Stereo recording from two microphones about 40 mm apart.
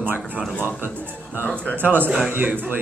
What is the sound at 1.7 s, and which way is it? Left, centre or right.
Speech, right.